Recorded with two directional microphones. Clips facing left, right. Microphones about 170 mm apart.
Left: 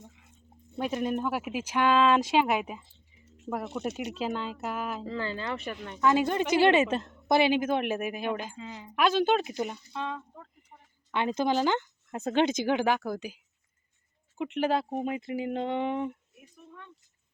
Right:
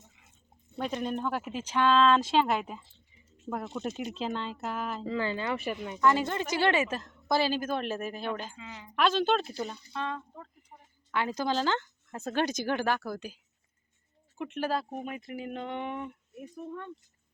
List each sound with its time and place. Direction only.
0.8 s speech: 5° left (ahead or behind)
4.1 s speech: 5° left (ahead or behind)
5.3 s speech: 10° right (ahead or behind)
6.0 s a woman's voice: 15° left (ahead or behind)
10.2 s speech: centre (ahead or behind)
11.1 s a woman's voice: 20° left (ahead or behind)
16.6 s speech: 55° right (ahead or behind)